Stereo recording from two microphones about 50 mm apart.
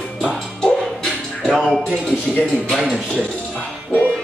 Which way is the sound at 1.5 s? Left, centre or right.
Centre.